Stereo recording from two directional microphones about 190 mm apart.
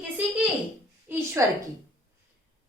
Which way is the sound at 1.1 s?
10° right (ahead or behind).